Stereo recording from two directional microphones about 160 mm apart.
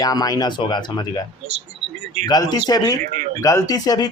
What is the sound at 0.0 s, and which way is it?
Speech, 25° left (ahead or behind).